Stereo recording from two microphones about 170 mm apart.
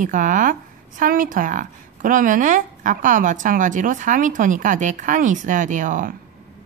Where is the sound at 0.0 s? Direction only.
50° right (ahead or behind).